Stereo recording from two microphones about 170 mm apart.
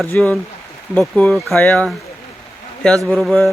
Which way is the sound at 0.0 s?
5° left (ahead or behind).